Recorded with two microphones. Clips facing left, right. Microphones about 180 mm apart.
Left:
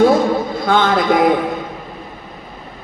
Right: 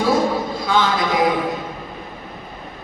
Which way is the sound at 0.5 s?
55° left (ahead or behind).